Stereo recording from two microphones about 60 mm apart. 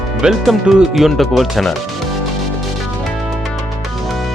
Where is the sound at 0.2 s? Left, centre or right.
Centre.